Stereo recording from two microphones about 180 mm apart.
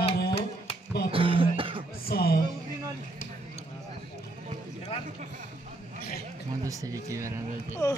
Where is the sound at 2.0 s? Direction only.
55° left (ahead or behind).